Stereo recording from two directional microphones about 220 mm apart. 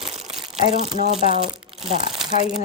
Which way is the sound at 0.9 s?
30° right (ahead or behind).